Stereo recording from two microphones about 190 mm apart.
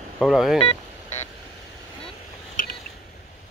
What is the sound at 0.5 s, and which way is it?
Telephone dialing, 30° left (ahead or behind).